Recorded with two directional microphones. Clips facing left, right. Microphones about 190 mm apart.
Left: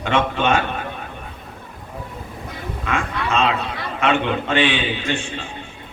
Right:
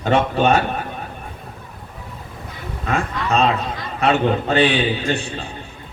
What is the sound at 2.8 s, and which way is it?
A man's voice, 40° right (ahead or behind).